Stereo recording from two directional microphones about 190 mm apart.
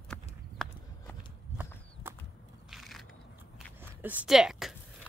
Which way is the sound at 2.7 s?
Centre (ahead or behind).